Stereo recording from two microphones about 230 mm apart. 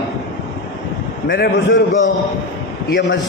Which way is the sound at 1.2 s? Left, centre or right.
Left.